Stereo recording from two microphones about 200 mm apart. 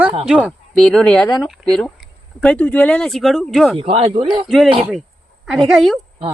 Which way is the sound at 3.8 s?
30° right (ahead or behind).